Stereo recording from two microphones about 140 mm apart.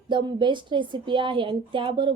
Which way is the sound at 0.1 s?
35° right (ahead or behind).